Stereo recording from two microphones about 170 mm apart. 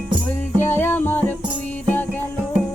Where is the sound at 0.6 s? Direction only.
15° left (ahead or behind).